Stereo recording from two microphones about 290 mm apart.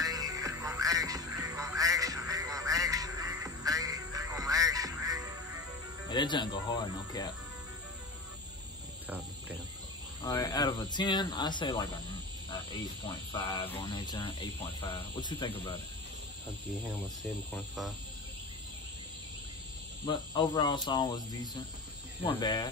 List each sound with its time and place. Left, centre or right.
0.0 s music: centre
6.0 s speech: centre
10.2 s speech: centre
13.3 s speech: centre
17.6 s speech: centre
20.1 s speech: centre